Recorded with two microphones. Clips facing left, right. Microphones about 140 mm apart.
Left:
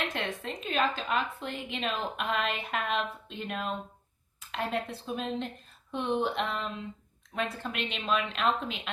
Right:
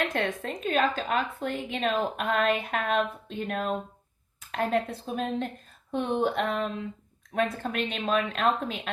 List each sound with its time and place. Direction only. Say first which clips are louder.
0.1 s a woman's voice: right 5 dB; 45° right (ahead or behind)